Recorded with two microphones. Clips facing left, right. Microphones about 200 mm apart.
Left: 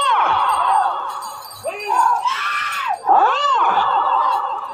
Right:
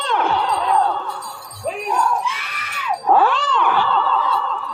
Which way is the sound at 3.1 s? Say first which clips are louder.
Right 1 dB; 45° left (ahead or behind).